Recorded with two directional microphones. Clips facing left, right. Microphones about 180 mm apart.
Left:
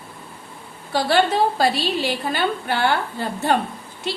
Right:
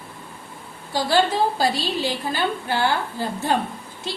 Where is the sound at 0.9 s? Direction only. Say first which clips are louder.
Left 2 dB; 65° left (ahead or behind).